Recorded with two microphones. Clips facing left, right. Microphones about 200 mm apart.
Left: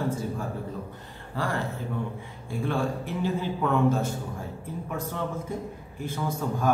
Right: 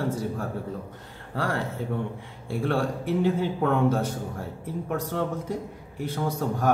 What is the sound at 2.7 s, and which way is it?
A man's voice, 65° right (ahead or behind).